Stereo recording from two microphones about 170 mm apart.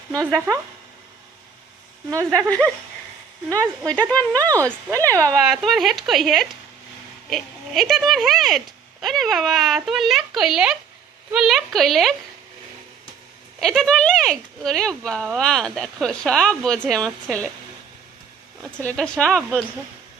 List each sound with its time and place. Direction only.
0.2 s speech: 5° left (ahead or behind)
2.0 s speech: 20° right (ahead or behind)
3.6 s speech: 10° left (ahead or behind)
4.5 s speech: 20° right (ahead or behind)
5.4 s speech: centre (ahead or behind)
13.6 s speech: 5° left (ahead or behind)
18.8 s speech: 5° left (ahead or behind)